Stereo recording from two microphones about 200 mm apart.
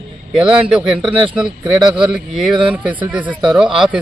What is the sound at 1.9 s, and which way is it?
A man's voice, 5° right (ahead or behind).